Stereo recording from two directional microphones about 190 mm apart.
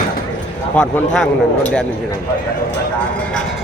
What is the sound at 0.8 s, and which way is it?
Speech, 5° left (ahead or behind).